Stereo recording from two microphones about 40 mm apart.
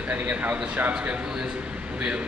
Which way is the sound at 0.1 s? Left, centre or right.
Right.